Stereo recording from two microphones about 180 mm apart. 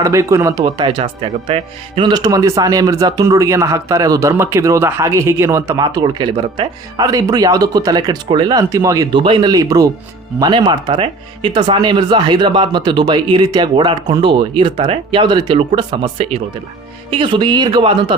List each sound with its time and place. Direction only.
0.0 s speech: 15° right (ahead or behind)